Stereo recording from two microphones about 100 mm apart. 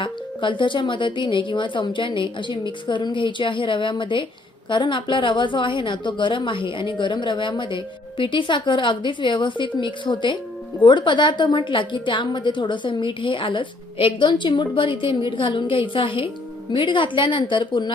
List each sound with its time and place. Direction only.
0.0 s a woman's voice: 55° left (ahead or behind)